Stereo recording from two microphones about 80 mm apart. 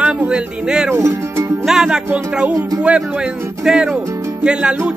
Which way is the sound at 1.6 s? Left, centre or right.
Centre.